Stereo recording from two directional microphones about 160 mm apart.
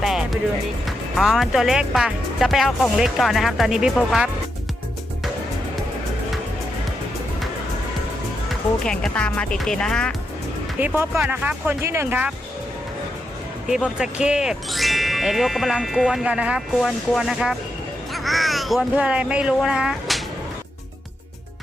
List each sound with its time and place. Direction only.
0.0 s music: centre (ahead or behind)
0.9 s speech: centre (ahead or behind)
8.8 s speech: 5° left (ahead or behind)
10.8 s speech: 10° right (ahead or behind)
13.7 s speech: 5° right (ahead or behind)